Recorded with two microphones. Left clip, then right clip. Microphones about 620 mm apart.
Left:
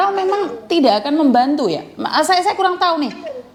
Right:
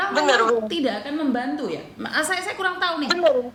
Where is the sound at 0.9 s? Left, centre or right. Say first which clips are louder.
Left 11 dB; left.